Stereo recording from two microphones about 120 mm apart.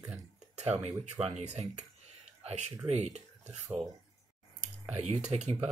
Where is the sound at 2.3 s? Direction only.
65° right (ahead or behind).